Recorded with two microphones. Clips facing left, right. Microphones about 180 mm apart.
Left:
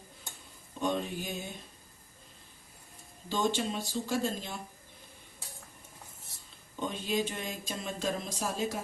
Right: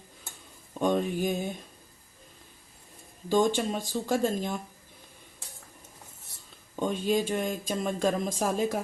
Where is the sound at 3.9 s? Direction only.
50° right (ahead or behind).